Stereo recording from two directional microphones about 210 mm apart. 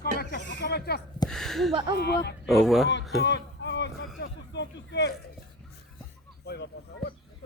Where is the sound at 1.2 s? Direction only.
Centre (ahead or behind).